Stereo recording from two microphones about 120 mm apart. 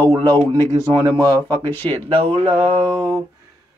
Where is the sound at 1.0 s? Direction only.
30° right (ahead or behind); by 2.4 s 50° right (ahead or behind).